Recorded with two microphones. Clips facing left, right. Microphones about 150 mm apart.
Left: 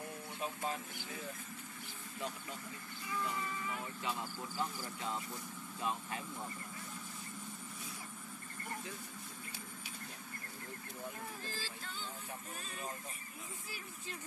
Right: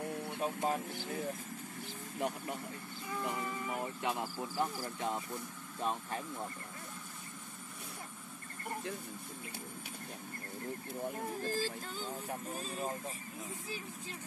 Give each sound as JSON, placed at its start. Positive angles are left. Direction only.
{"t": 0.7, "sound": "speech", "side_deg": -50}
{"t": 11.1, "sound": "speech", "side_deg": -45}
{"t": 12.5, "sound": "speech", "side_deg": -35}